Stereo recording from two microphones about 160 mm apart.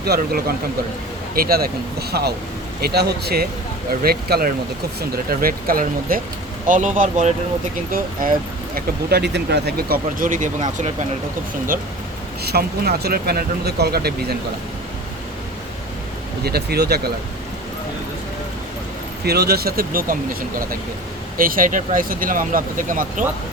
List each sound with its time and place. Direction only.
0.0 s speech: 75° right (ahead or behind)
4.0 s speech: 75° right (ahead or behind); by 10.9 s 50° right (ahead or behind)
12.4 s speech: 85° right
16.4 s speech: 80° right
19.2 s speech: 85° right; by 20.1 s 65° right (ahead or behind)
21.3 s speech: 60° right (ahead or behind)